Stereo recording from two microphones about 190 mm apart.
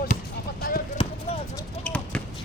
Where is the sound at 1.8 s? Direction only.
5° left (ahead or behind).